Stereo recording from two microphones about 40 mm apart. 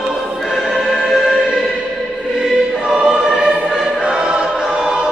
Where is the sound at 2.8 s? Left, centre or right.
Centre.